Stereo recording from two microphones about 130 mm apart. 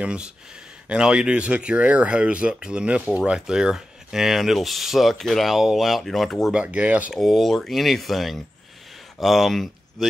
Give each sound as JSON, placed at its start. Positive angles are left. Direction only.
{"t": 0.0, "sound": "speech", "side_deg": -10}
{"t": 6.6, "sound": "speech", "side_deg": -10}
{"t": 7.2, "sound": "speech", "side_deg": 0}